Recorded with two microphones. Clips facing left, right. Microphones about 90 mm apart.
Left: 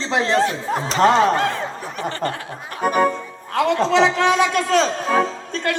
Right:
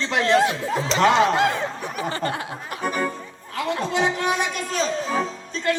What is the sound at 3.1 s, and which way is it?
Music, 75° left (ahead or behind).